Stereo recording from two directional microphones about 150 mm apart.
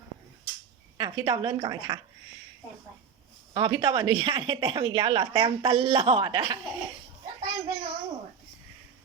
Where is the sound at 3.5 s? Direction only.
30° right (ahead or behind).